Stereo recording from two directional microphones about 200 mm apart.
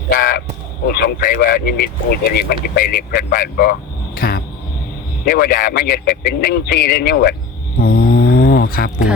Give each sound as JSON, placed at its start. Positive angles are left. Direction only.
{"t": 0.1, "sound": "crow", "side_deg": 50}
{"t": 0.9, "sound": "speech", "side_deg": 50}
{"t": 7.8, "sound": "a sound", "side_deg": 50}